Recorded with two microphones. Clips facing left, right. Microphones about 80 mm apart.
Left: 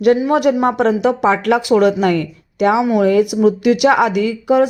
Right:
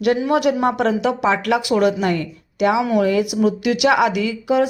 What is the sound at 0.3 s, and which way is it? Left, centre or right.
Speech, left.